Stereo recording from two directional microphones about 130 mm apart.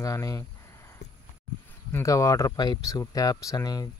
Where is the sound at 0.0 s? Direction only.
25° left (ahead or behind).